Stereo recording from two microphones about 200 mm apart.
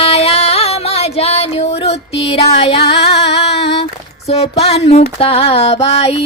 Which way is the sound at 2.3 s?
30° left (ahead or behind).